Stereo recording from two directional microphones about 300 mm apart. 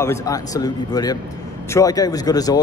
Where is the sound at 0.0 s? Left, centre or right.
Centre.